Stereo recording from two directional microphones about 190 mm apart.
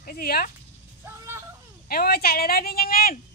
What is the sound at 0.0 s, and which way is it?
Speech, 50° left (ahead or behind).